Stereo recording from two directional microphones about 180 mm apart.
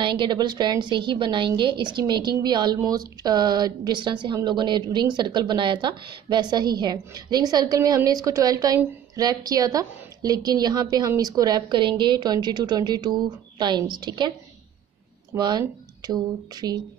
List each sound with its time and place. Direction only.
0.0 s a woman's voice: 25° right (ahead or behind)
15.3 s a woman's voice: 25° right (ahead or behind)